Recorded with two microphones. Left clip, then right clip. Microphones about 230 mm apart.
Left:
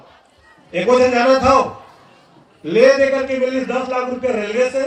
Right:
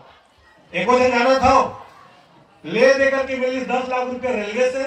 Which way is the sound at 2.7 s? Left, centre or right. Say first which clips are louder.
Left 3 dB; centre.